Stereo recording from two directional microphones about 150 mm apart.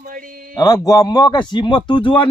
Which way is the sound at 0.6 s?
25° left (ahead or behind).